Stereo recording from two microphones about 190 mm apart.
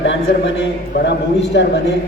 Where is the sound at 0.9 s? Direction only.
60° left (ahead or behind).